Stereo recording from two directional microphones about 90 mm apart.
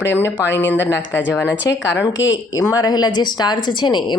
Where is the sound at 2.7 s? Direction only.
50° left (ahead or behind).